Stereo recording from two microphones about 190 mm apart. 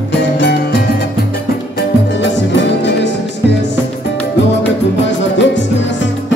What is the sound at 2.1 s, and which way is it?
Music, 70° left (ahead or behind).